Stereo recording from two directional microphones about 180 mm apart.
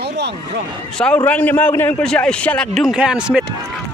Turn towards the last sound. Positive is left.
turn(degrees=-5)  # may be behind; listen again after turning